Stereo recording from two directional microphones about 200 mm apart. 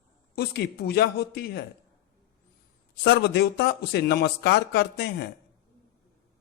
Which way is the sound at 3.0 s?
55° left (ahead or behind).